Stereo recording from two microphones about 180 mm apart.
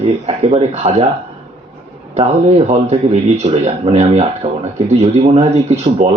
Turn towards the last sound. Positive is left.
turn(degrees=-35)  # may be behind; listen again after turning